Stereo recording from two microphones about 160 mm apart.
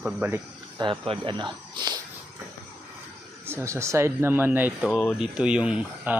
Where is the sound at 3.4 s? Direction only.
15° right (ahead or behind).